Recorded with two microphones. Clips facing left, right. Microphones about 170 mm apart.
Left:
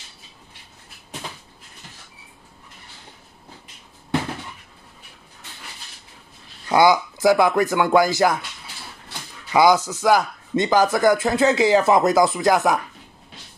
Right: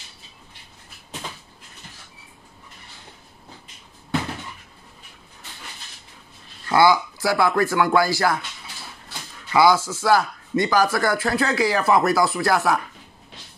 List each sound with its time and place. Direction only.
6.7 s speech: 20° left (ahead or behind)
9.5 s speech: 20° left (ahead or behind)